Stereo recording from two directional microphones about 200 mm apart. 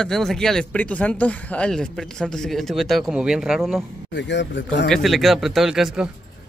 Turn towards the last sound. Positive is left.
turn(degrees=-5)  # may be behind; listen again after turning